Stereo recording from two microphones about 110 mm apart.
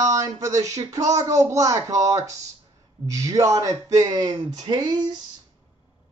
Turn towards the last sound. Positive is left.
turn(degrees=-40)  # may be behind; listen again after turning